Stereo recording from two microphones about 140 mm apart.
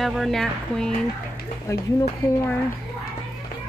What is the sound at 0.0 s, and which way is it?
Speech, centre (ahead or behind).